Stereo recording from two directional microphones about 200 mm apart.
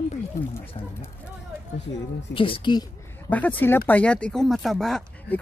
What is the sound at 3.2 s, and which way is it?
Speech, 10° left (ahead or behind).